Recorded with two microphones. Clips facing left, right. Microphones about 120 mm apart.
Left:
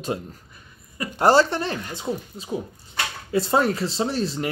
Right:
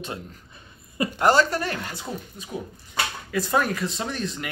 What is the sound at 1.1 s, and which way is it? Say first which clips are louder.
Speech: left 3 dB; 30° left (ahead or behind).